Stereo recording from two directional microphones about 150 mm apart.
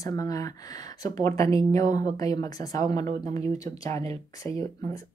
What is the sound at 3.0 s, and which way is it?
Speech, 50° right (ahead or behind).